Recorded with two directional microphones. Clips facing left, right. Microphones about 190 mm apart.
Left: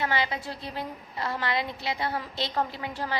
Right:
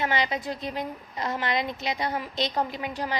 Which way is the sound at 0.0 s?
20° right (ahead or behind).